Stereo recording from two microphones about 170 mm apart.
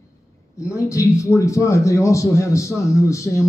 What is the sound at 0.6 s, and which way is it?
A man's voice, 20° left (ahead or behind).